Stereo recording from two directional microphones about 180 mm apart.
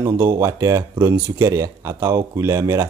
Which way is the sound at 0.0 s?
15° right (ahead or behind).